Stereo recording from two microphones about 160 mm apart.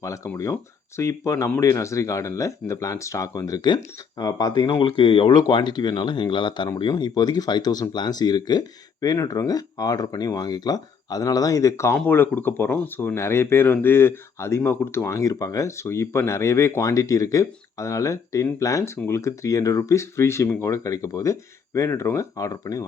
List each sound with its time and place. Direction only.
0.9 s speech: 20° left (ahead or behind)